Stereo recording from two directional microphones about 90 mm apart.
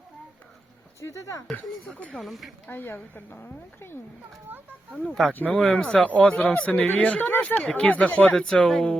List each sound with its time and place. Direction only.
1.0 s speech: 35° left (ahead or behind)
1.5 s speech: 15° left (ahead or behind)
2.1 s speech: centre (ahead or behind)
2.6 s speech: 25° left (ahead or behind)
4.9 s speech: 10° left (ahead or behind)
5.5 s speech: 10° left (ahead or behind)